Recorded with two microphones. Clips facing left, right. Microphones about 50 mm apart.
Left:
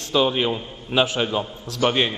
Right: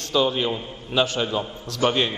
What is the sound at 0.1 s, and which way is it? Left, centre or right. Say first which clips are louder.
A man's voice: left 2 dB; centre.